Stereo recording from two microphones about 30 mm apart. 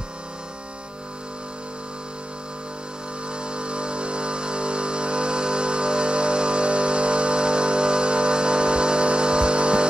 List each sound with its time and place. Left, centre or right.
3.4 s music: right